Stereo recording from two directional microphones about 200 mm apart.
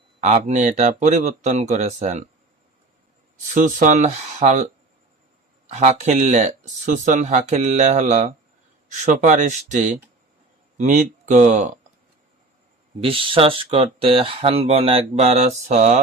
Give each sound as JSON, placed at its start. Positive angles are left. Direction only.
{"t": 0.2, "sound": "speech", "side_deg": -35}
{"t": 3.5, "sound": "speech", "side_deg": -40}
{"t": 5.7, "sound": "speech", "side_deg": -35}
{"t": 13.0, "sound": "speech", "side_deg": -25}